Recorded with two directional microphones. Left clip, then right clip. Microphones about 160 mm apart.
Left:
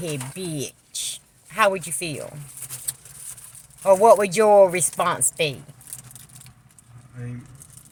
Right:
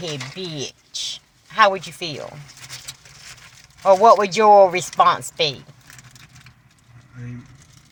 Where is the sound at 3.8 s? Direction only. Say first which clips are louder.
Right 2 dB; 10° left (ahead or behind).